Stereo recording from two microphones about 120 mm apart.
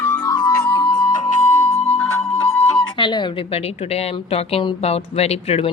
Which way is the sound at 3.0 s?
40° left (ahead or behind).